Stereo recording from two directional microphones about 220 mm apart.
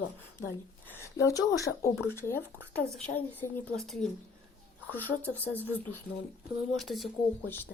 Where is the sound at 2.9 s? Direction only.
5° left (ahead or behind).